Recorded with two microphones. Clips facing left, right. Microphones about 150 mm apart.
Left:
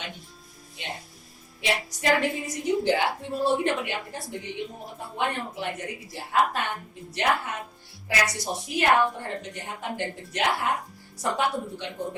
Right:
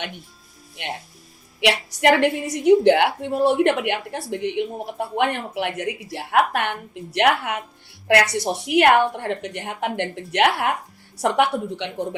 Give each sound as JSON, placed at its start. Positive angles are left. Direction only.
{"t": 0.8, "sound": "a woman's voice", "side_deg": -70}